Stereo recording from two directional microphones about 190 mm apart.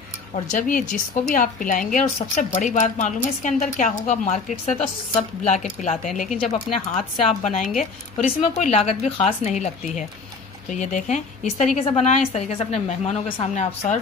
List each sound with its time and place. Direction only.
0.5 s a woman's voice: 45° left (ahead or behind)